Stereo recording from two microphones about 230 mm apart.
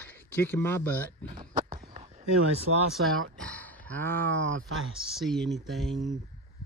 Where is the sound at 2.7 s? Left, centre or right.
Right.